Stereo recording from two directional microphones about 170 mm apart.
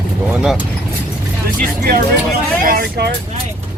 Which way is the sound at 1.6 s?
55° right (ahead or behind).